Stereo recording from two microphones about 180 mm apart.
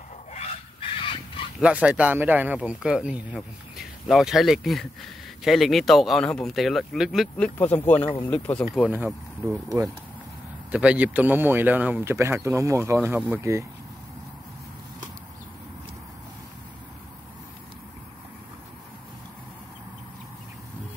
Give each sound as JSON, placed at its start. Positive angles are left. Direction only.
{"t": 0.3, "sound": "a sound", "side_deg": 35}
{"t": 1.6, "sound": "speech", "side_deg": -5}
{"t": 8.7, "sound": "speech", "side_deg": -5}